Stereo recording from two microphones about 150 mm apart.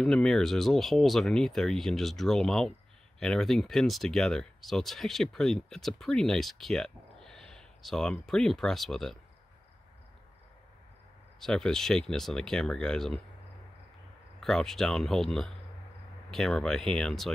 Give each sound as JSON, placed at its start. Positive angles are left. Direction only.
{"t": 0.0, "sound": "speech", "side_deg": 5}
{"t": 11.3, "sound": "speech", "side_deg": 5}
{"t": 14.4, "sound": "speech", "side_deg": 5}